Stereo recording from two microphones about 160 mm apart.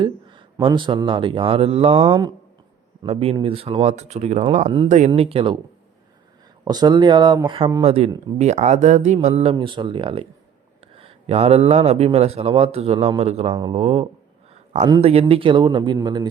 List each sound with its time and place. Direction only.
0.0 s speech: 30° right (ahead or behind)
2.0 s speech: 25° right (ahead or behind)
3.1 s speech: 40° right (ahead or behind)
6.7 s speech: 25° right (ahead or behind)
14.5 s a sound: 40° right (ahead or behind)
15.0 s speech: 40° right (ahead or behind)